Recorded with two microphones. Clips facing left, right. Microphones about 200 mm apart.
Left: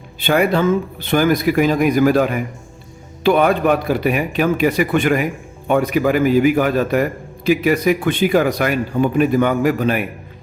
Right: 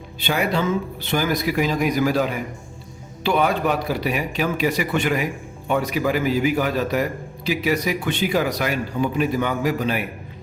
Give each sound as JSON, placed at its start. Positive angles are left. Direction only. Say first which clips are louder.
{"t": 0.2, "sound": "a man's voice", "louder": "left 7 dB", "side_deg": 55}